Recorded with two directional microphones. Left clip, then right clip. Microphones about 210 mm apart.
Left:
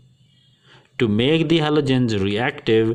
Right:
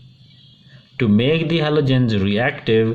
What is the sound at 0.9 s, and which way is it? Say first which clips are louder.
Speech: even; 45° left (ahead or behind).